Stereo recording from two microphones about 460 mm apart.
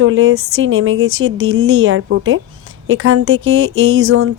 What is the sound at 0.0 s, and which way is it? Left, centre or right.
Speech, right.